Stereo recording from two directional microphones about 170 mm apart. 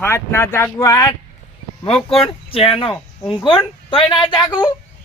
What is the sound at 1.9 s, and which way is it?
Speech, 35° left (ahead or behind).